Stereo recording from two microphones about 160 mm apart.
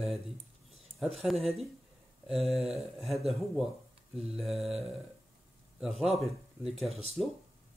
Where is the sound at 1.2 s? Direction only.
Centre (ahead or behind).